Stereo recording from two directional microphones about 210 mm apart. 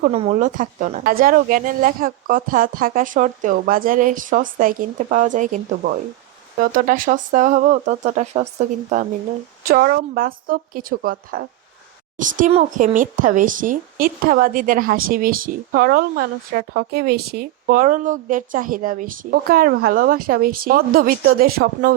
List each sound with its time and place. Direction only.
0.0 s speech: 30° right (ahead or behind)
9.6 s a woman's voice: 45° right (ahead or behind)